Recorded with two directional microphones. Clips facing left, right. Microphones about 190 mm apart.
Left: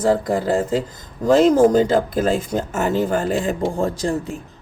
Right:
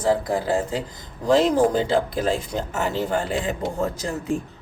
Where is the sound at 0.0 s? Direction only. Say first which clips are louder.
Left 3 dB; 50° left (ahead or behind).